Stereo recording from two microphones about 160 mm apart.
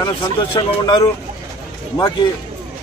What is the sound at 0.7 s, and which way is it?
Speech, 30° left (ahead or behind).